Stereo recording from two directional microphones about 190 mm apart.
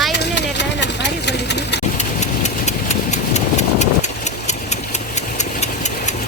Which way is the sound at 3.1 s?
35° left (ahead or behind).